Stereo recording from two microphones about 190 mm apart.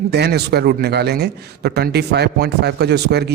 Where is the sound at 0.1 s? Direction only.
60° right (ahead or behind).